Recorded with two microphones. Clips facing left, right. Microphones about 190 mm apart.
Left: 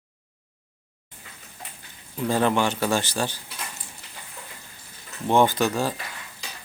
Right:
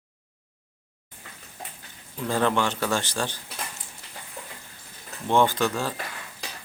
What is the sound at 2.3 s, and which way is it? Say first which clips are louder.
Speech: left 2 dB; 10° left (ahead or behind).